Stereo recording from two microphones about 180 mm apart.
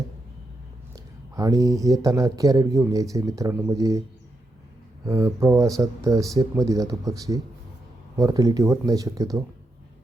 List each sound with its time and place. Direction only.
0.9 s speech: 20° right (ahead or behind)
5.0 s speech: 15° right (ahead or behind)